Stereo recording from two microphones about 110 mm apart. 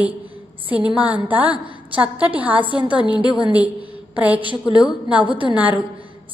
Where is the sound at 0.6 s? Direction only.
15° right (ahead or behind).